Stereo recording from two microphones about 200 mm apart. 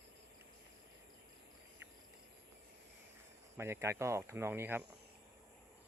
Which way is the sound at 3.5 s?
10° right (ahead or behind).